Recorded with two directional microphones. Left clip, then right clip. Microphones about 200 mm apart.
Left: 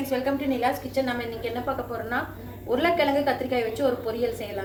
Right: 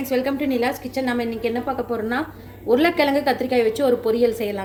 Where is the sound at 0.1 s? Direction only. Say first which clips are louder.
Right 5 dB; 55° right (ahead or behind).